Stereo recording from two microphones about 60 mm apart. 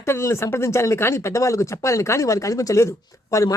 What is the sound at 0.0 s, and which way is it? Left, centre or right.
Speech, left.